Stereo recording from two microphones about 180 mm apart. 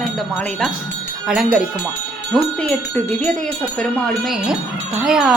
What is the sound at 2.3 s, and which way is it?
Speech, 5° left (ahead or behind).